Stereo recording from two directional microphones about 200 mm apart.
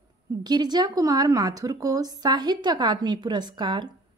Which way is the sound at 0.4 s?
20° right (ahead or behind).